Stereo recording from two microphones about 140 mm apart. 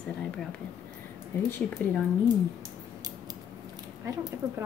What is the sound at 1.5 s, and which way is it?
Speech, 10° left (ahead or behind).